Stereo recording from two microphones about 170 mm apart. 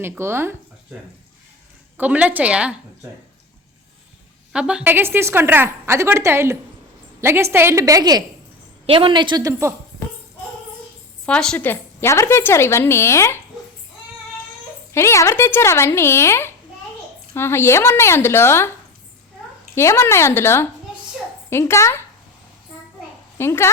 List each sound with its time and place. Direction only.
0.0 s speech: 15° right (ahead or behind)
2.0 s a woman's voice: 10° right (ahead or behind)
4.5 s a woman's voice: 5° right (ahead or behind); by 8.2 s 20° right (ahead or behind)
8.9 s a woman's voice: 30° right (ahead or behind)
11.3 s a woman's voice: 5° left (ahead or behind)
14.9 s a woman's voice: 15° left (ahead or behind)
19.7 s a woman's voice: 15° left (ahead or behind)
23.4 s a woman's voice: 15° left (ahead or behind)